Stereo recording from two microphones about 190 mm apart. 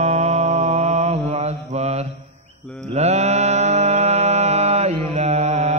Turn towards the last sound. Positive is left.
turn(degrees=-35)  # may be behind; listen again after turning